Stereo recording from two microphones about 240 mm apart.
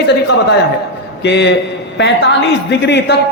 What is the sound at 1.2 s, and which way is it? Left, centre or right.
A man's voice, left.